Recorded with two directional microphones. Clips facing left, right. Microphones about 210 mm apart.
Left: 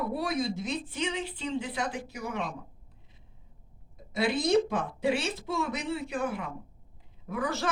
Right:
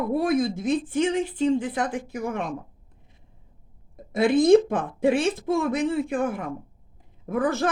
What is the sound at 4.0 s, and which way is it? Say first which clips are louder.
A woman's voice: right 9 dB; 50° right (ahead or behind).